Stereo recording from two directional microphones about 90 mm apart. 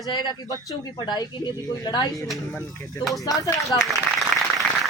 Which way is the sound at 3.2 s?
40° left (ahead or behind).